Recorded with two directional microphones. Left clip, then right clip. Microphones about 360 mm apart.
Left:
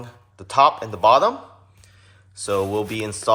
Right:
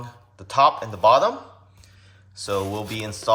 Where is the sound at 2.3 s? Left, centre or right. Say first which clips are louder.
Left 4 dB; centre.